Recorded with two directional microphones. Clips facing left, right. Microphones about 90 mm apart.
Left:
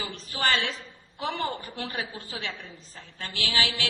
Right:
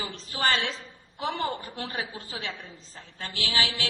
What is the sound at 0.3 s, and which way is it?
A woman's voice, 30° right (ahead or behind).